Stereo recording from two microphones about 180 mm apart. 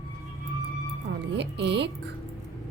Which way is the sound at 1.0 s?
75° right (ahead or behind).